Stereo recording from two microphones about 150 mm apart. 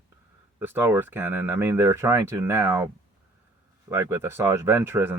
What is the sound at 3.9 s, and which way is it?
Speech, 15° right (ahead or behind).